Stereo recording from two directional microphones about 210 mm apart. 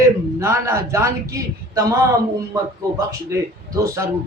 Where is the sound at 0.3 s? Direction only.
15° right (ahead or behind).